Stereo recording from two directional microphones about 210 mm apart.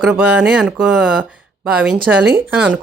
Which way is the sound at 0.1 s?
5° right (ahead or behind).